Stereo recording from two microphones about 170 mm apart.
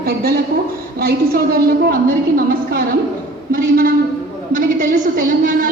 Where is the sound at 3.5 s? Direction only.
55° right (ahead or behind).